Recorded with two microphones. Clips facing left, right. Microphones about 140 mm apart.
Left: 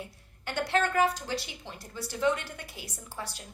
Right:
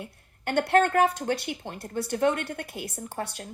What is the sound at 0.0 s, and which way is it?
A woman's voice, 55° right (ahead or behind).